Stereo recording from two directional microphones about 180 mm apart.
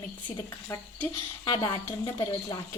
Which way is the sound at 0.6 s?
15° left (ahead or behind).